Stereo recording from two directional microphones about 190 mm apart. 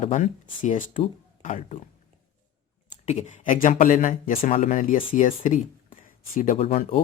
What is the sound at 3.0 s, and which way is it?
Speech, 35° left (ahead or behind).